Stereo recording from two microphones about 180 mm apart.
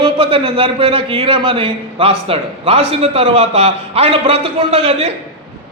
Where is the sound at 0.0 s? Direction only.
30° right (ahead or behind).